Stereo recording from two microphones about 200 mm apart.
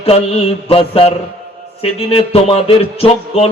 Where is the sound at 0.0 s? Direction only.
30° left (ahead or behind).